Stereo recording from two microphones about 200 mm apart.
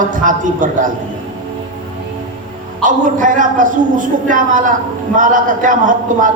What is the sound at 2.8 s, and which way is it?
A man's voice, 40° right (ahead or behind).